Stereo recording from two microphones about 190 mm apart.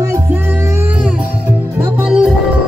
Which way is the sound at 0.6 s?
15° right (ahead or behind).